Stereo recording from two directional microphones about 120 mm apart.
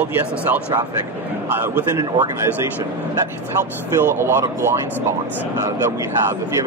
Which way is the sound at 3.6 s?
20° right (ahead or behind).